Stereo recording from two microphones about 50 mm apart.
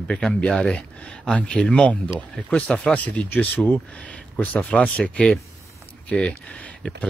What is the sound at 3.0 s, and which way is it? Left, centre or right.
Speech, left.